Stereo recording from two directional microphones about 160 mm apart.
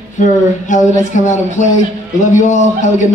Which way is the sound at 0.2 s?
50° left (ahead or behind).